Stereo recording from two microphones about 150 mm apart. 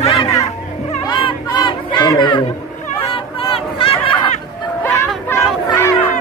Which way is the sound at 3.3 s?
40° left (ahead or behind).